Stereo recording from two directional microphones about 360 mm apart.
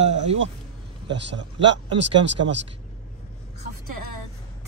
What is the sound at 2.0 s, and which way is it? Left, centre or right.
Speech, right.